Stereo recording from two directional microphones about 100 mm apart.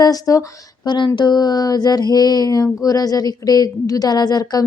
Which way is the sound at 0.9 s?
50° left (ahead or behind).